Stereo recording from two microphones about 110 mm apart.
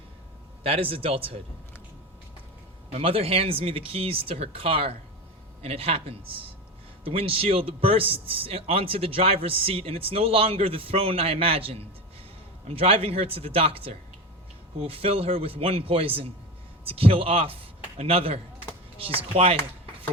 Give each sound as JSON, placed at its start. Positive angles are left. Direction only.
{"t": 0.6, "sound": "speech", "side_deg": -60}
{"t": 2.9, "sound": "a man's voice", "side_deg": -60}